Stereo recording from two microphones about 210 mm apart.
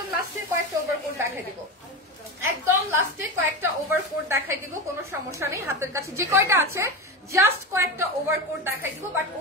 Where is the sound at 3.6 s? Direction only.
10° right (ahead or behind).